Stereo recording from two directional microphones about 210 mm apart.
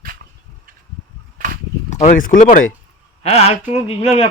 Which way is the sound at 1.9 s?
35° left (ahead or behind).